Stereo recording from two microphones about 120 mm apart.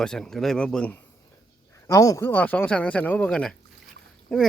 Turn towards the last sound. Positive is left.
turn(degrees=5)  # may be behind; listen again after turning